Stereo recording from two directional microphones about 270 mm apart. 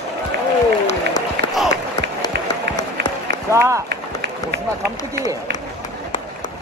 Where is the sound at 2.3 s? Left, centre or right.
Right.